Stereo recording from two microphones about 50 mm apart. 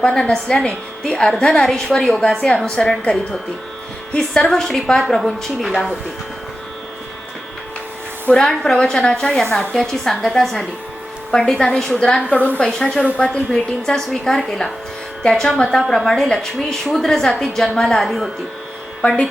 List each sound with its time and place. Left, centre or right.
0.0 s a woman's voice: centre
8.3 s a woman's voice: centre
19.0 s a woman's voice: centre